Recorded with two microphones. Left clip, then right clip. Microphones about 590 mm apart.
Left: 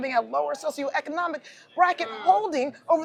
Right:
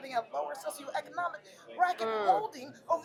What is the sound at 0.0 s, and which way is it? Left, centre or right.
A woman's voice, left.